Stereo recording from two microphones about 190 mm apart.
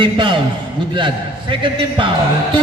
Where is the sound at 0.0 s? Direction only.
25° right (ahead or behind).